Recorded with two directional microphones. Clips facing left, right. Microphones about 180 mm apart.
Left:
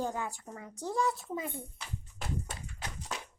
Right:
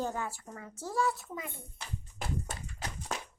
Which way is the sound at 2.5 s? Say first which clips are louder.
Right 2 dB; 45° right (ahead or behind).